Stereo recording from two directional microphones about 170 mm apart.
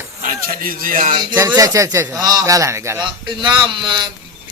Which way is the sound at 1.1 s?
25° right (ahead or behind).